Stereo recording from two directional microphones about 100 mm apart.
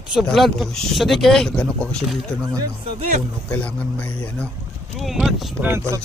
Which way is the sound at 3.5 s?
10° left (ahead or behind).